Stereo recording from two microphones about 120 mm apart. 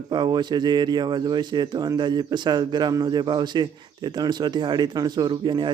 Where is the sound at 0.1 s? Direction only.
40° right (ahead or behind).